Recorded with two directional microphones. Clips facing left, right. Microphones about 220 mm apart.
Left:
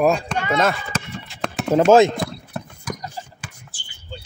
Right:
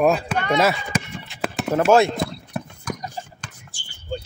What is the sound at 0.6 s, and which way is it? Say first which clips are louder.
Speech: right 1 dB; 10° right (ahead or behind).